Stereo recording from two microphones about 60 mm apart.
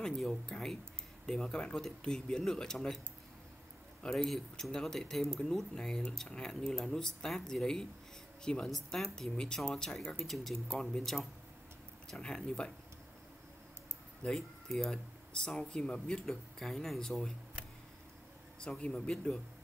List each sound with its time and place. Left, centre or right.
0.0 s speech: centre
4.0 s speech: centre
14.2 s speech: centre
16.3 s speech: centre
18.6 s speech: centre